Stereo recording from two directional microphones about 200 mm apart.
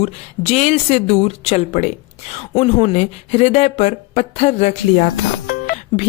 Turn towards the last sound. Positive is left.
turn(degrees=45)  # may be behind; listen again after turning